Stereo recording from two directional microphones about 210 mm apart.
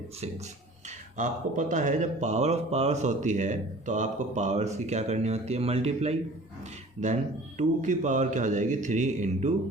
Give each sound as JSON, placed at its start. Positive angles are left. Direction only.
{"t": 1.1, "sound": "speech", "side_deg": -40}